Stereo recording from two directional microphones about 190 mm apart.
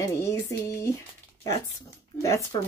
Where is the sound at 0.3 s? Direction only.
15° left (ahead or behind).